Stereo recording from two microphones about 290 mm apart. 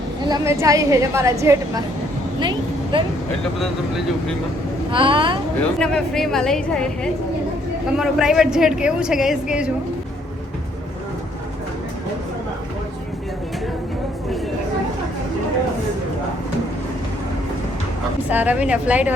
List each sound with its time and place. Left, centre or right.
0.3 s a woman's voice: centre
4.9 s a woman's voice: centre
5.8 s a woman's voice: centre
18.3 s a woman's voice: centre